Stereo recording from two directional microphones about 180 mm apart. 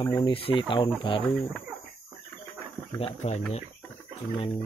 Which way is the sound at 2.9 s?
35° left (ahead or behind).